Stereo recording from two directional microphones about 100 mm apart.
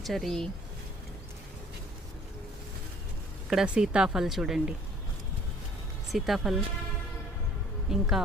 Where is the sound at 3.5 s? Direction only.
5° right (ahead or behind).